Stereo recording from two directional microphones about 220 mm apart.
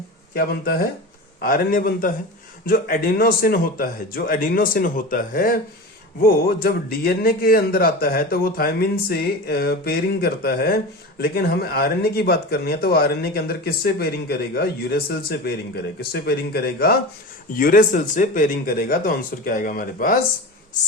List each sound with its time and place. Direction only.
0.3 s speech: 40° left (ahead or behind)